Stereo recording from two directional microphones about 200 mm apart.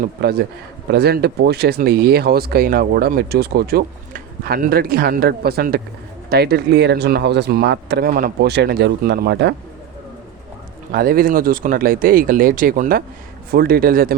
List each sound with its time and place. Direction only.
0.0 s speech: 55° right (ahead or behind)
10.9 s speech: 50° right (ahead or behind)